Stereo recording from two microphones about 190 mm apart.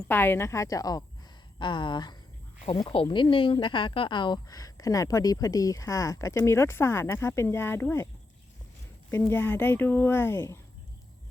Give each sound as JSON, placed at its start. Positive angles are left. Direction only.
{"t": 0.1, "sound": "speech", "side_deg": 10}
{"t": 9.0, "sound": "speech", "side_deg": 15}